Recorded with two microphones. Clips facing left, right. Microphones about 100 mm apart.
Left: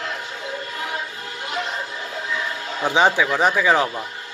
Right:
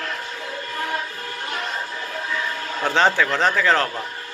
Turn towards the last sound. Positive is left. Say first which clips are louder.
# left 1 dB
turn(degrees=15)  # may be behind; listen again after turning